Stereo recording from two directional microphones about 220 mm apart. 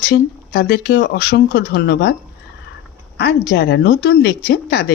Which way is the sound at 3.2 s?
50° left (ahead or behind).